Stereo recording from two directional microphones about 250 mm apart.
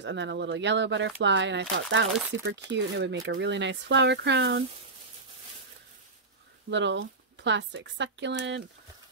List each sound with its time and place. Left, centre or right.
0.0 s speech: right
6.7 s speech: right